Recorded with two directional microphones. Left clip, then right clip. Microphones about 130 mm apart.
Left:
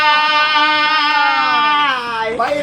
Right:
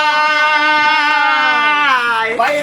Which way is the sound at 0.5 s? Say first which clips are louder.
Right 1 dB; 15° left (ahead or behind).